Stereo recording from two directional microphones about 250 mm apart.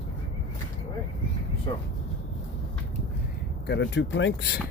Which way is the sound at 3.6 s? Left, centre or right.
Left.